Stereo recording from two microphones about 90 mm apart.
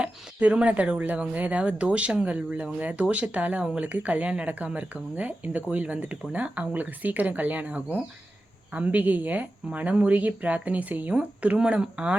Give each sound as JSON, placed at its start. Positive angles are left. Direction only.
{"t": 0.0, "sound": "speech", "side_deg": -15}